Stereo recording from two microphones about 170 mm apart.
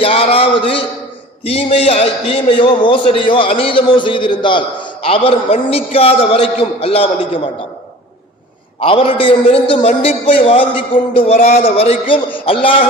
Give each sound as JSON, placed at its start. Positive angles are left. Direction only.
{"t": 0.0, "sound": "a sound", "side_deg": 35}
{"t": 1.5, "sound": "a man's voice", "side_deg": 35}
{"t": 8.8, "sound": "a man's voice", "side_deg": 35}
{"t": 11.3, "sound": "a man's voice", "side_deg": 45}